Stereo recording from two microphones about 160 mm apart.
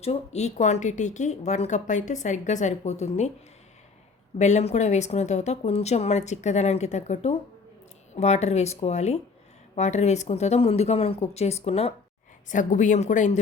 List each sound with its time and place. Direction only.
0.0 s a woman's voice: 40° left (ahead or behind)
4.4 s a woman's voice: 45° left (ahead or behind)
12.5 s a woman's voice: 50° left (ahead or behind)